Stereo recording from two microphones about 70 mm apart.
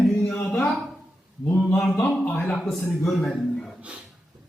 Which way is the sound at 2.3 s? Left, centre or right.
Centre.